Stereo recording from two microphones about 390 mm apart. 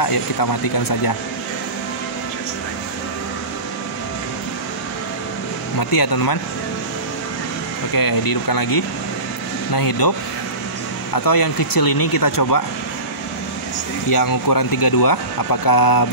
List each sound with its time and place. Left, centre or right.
0.0 s speech: left
5.8 s speech: left
7.9 s speech: left
11.1 s speech: left
14.1 s speech: left